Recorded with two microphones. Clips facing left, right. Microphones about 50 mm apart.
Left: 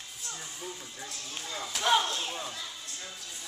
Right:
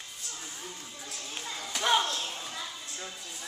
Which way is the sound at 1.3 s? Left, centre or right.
Centre.